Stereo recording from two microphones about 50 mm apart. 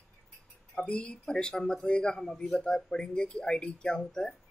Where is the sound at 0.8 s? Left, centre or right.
Left.